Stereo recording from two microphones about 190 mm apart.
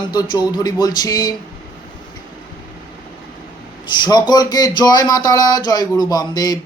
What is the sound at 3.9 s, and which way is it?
Speech, 25° left (ahead or behind).